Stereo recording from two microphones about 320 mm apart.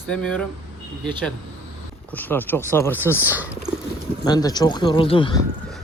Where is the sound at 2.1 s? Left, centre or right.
Centre.